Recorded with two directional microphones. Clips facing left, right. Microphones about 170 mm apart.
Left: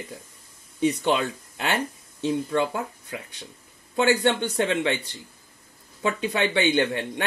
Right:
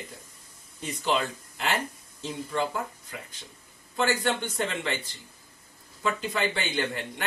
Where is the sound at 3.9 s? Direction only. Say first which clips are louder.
Left 5 dB; 70° left (ahead or behind).